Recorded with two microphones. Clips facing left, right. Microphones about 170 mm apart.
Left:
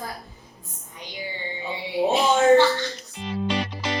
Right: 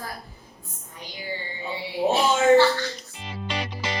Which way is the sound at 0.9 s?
20° left (ahead or behind).